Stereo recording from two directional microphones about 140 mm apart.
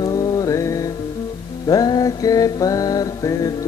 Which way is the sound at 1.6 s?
30° left (ahead or behind).